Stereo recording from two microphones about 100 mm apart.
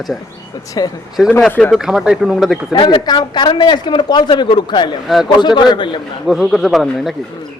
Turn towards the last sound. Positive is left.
turn(degrees=0)  # may be behind; listen again after turning